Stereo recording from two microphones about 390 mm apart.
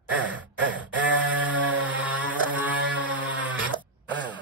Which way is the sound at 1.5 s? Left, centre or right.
Centre.